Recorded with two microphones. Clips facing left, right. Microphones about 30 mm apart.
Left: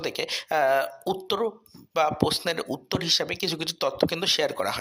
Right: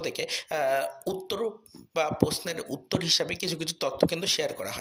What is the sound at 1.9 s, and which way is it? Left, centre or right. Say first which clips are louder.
Speech: left 4 dB; centre.